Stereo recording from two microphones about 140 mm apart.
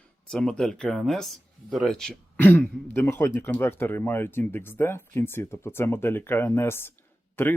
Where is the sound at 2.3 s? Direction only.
15° left (ahead or behind).